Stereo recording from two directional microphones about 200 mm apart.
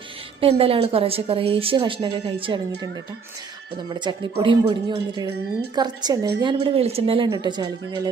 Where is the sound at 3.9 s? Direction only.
20° right (ahead or behind).